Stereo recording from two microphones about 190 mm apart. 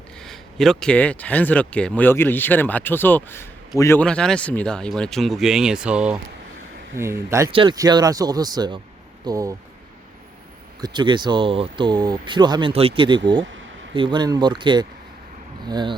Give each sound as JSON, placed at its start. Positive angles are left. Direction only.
{"t": 0.2, "sound": "speech", "side_deg": 0}
{"t": 10.8, "sound": "speech", "side_deg": -20}